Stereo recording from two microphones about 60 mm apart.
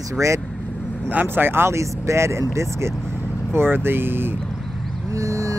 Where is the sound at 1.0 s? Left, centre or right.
Right.